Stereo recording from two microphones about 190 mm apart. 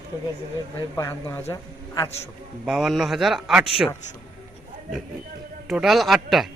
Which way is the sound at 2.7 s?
Centre (ahead or behind).